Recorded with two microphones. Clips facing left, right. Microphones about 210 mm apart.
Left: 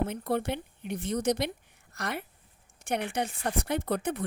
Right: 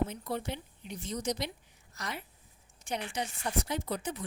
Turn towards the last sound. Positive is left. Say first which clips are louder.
# left 6 dB
turn(degrees=60)  # may be behind; listen again after turning